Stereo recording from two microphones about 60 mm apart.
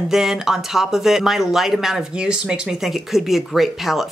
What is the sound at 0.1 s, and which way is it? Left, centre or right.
Speech, centre.